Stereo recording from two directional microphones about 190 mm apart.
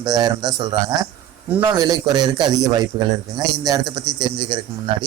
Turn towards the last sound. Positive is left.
turn(degrees=-25)  # may be behind; listen again after turning